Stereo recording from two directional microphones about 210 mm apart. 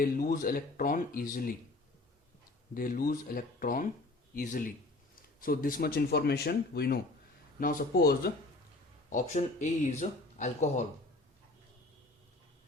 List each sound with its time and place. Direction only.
0.0 s speech: 45° left (ahead or behind)
2.7 s speech: 45° left (ahead or behind)
9.0 s speech: 35° left (ahead or behind)